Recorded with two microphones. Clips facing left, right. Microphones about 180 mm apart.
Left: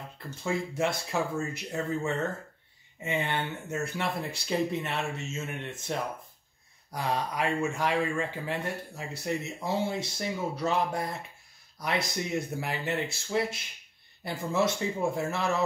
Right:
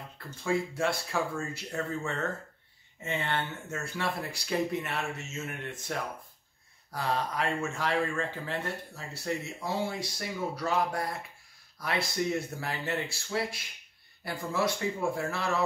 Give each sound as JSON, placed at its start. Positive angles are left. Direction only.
{"t": 0.4, "sound": "speech", "side_deg": 20}